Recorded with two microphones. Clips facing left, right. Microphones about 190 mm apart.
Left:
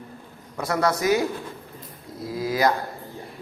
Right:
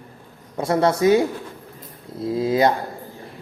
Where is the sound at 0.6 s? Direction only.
25° right (ahead or behind).